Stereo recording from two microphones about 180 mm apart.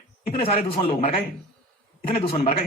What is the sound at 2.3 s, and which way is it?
Speech, 35° left (ahead or behind).